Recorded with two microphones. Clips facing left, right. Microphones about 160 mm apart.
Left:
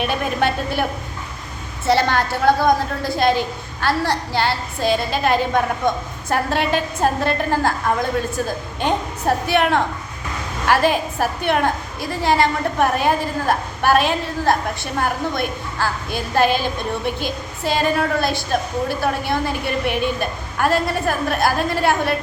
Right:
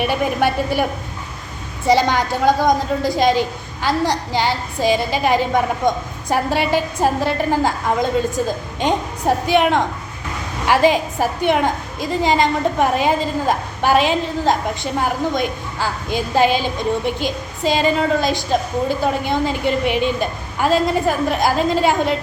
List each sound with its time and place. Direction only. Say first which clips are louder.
0.0 s a woman's voice: right 2 dB; 10° right (ahead or behind)